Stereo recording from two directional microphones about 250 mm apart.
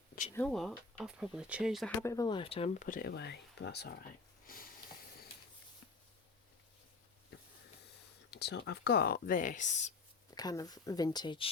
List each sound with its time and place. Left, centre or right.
0.3 s speech: centre
2.0 s speech: centre; by 3.9 s left
4.4 s a sound: left
8.3 s speech: left
10.3 s speech: centre